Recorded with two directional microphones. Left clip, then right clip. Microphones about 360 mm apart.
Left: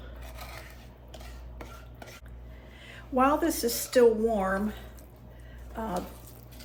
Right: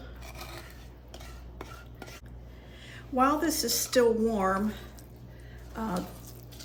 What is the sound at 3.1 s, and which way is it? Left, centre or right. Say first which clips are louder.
A woman's voice: left 1 dB; centre.